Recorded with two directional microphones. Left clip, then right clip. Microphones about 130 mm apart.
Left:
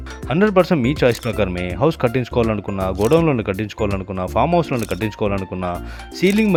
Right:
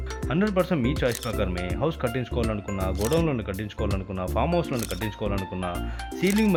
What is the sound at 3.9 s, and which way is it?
Speech, 25° left (ahead or behind).